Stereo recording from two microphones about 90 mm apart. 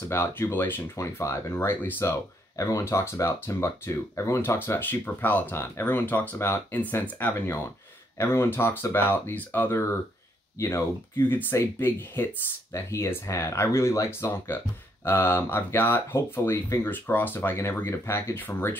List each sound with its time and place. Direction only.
0.1 s speech: 25° left (ahead or behind)
0.9 s speech: 35° left (ahead or behind)
2.5 s speech: 35° left (ahead or behind)